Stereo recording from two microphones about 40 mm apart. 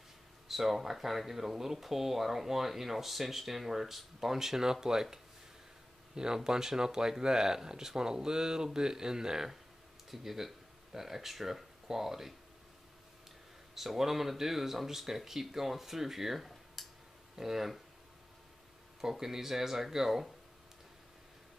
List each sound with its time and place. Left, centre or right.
0.5 s speech: centre
6.1 s speech: centre
13.7 s speech: centre
18.9 s speech: centre